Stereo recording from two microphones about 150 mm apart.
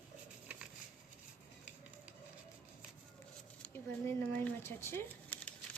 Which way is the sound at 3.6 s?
15° left (ahead or behind).